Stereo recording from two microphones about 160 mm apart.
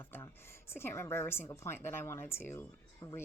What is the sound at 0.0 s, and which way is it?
A woman's voice, 15° left (ahead or behind).